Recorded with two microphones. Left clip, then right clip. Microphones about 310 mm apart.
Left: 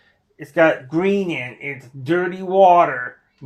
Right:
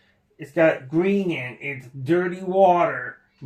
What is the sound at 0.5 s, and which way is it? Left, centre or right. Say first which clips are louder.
Speech: left 3 dB; left.